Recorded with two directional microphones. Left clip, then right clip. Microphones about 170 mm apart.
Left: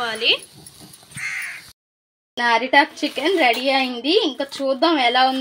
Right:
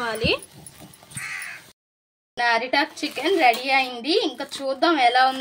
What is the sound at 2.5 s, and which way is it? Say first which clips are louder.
Speech: left 6 dB; 35° left (ahead or behind).